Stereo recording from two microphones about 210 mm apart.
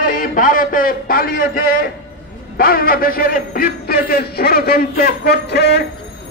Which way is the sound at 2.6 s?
45° left (ahead or behind).